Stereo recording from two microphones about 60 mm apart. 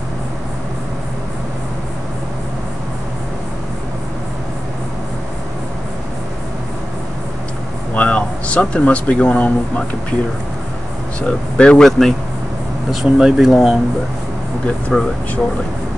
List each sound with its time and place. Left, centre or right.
7.9 s speech: left
11.1 s speech: centre
11.8 s speech: centre
14.9 s speech: centre